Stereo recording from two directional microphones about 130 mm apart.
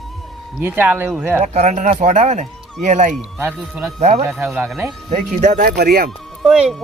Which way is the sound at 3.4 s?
15° right (ahead or behind).